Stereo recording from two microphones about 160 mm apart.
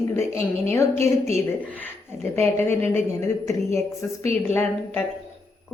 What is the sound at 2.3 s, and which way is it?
A woman's voice, 15° left (ahead or behind).